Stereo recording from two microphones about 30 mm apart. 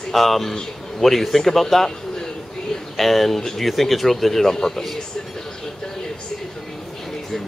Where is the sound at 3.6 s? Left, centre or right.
Centre.